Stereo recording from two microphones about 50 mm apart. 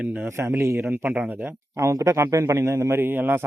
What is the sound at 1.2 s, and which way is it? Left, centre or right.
Speech, right.